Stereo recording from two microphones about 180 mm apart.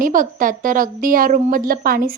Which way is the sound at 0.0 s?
50° right (ahead or behind).